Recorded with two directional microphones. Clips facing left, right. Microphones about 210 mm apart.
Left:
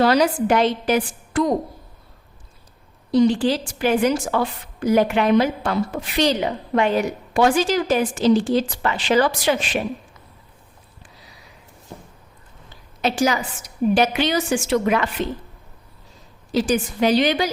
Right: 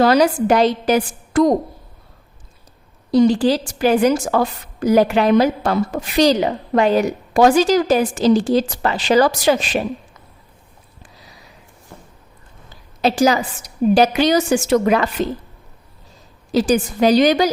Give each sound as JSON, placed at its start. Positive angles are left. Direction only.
{"t": 0.0, "sound": "a woman's voice", "side_deg": -40}
{"t": 3.1, "sound": "a woman's voice", "side_deg": -40}
{"t": 13.0, "sound": "a woman's voice", "side_deg": -35}
{"t": 16.5, "sound": "a woman's voice", "side_deg": -40}